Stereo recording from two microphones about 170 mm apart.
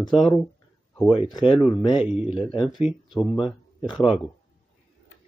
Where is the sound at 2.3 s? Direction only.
30° left (ahead or behind).